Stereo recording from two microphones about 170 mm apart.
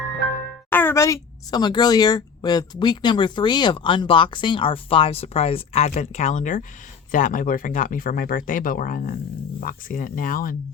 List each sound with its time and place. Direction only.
0.7 s a woman's voice: 10° left (ahead or behind); by 10.5 s 55° left (ahead or behind)